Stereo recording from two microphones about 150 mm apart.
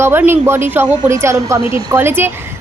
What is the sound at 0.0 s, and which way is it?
A woman's voice, 15° right (ahead or behind).